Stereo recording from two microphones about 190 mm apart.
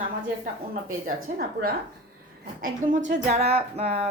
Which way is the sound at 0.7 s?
50° right (ahead or behind).